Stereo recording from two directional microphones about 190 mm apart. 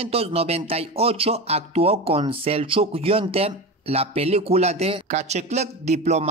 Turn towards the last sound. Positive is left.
turn(degrees=-35)  # may be behind; listen again after turning